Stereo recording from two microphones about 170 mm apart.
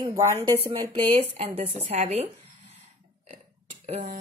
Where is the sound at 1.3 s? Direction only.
40° right (ahead or behind).